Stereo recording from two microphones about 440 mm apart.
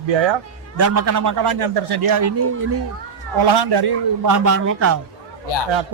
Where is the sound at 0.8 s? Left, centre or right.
Right.